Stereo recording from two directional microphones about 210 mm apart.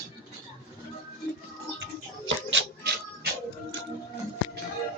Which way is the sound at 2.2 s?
60° right (ahead or behind).